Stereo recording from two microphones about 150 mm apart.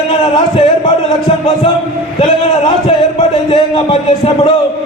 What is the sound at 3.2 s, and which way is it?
A man's voice, 40° left (ahead or behind).